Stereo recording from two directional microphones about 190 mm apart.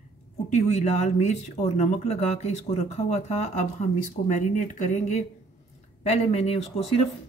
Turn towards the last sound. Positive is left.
turn(degrees=30)  # may be behind; listen again after turning